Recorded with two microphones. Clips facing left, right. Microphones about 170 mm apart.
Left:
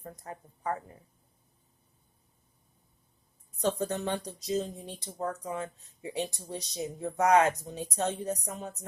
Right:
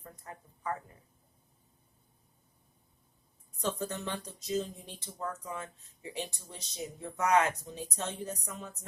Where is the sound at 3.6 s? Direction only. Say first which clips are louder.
Left 5 dB; 35° left (ahead or behind).